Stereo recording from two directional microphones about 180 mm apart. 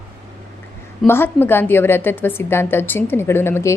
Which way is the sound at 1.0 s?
10° left (ahead or behind).